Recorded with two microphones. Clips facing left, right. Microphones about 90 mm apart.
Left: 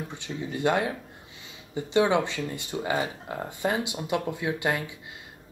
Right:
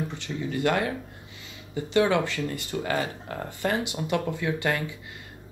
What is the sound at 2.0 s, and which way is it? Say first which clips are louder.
Speech: even; 20° left (ahead or behind).